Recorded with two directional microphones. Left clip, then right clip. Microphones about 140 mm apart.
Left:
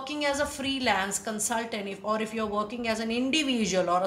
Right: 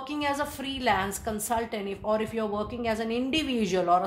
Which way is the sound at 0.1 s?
45° right (ahead or behind).